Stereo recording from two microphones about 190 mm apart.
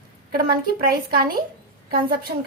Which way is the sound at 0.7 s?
50° right (ahead or behind).